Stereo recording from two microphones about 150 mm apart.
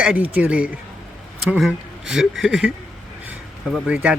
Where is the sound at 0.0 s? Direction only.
10° right (ahead or behind).